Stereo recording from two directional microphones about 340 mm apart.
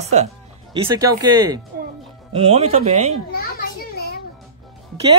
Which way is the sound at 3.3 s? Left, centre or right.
Left.